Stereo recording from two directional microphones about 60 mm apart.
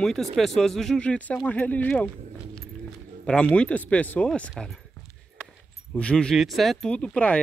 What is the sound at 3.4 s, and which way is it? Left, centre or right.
Speech, left.